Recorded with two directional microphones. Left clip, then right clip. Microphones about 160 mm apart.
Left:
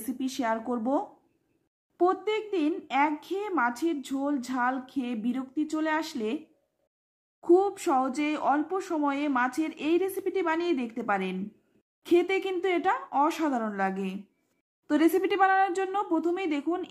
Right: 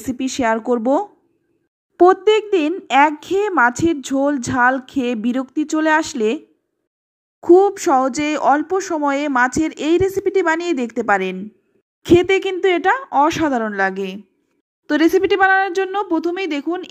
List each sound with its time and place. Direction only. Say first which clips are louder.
0.1 s speech: right 11 dB; 35° right (ahead or behind)